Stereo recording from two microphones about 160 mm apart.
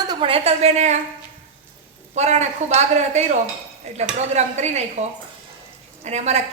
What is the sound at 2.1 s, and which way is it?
A man's voice, 45° right (ahead or behind).